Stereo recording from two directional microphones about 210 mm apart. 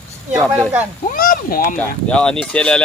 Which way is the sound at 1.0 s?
40° left (ahead or behind).